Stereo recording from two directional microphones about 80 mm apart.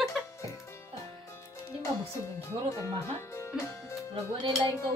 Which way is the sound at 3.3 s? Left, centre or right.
Left.